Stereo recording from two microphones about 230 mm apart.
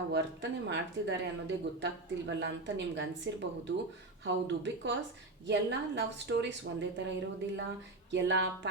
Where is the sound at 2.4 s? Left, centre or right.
Right.